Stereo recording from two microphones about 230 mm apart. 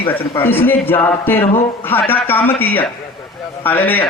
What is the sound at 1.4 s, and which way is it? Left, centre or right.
Speech, left.